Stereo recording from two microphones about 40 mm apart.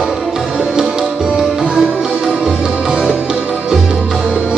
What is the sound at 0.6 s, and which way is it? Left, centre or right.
Music, centre.